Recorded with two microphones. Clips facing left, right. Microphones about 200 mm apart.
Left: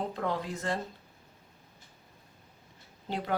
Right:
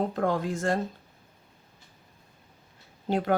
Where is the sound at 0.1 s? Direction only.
50° right (ahead or behind).